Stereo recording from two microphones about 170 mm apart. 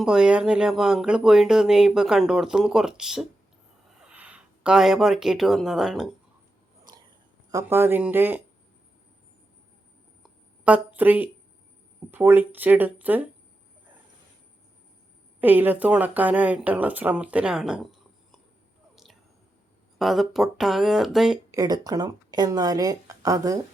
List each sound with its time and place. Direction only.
0.0 s speech: 5° right (ahead or behind)
7.5 s speech: 15° right (ahead or behind)
10.6 s a woman's voice: 10° right (ahead or behind)
15.4 s speech: 10° right (ahead or behind)
20.0 s speech: centre (ahead or behind)
21.5 s speech: 20° right (ahead or behind)